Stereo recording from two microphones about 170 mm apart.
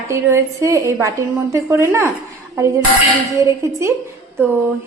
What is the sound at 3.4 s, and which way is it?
Speech, 15° right (ahead or behind).